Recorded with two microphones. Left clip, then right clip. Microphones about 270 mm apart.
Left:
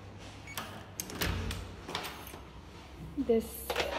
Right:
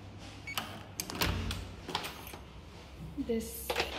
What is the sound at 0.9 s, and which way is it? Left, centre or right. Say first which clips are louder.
Music: right 2 dB; centre.